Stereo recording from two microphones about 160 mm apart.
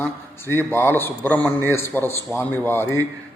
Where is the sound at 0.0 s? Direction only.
15° left (ahead or behind).